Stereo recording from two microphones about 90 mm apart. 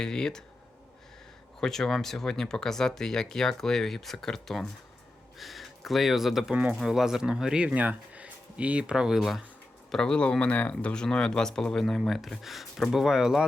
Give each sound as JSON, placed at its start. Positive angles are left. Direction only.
{"t": 0.0, "sound": "speech", "side_deg": 5}
{"t": 1.6, "sound": "speech", "side_deg": 5}
{"t": 9.9, "sound": "speech", "side_deg": 10}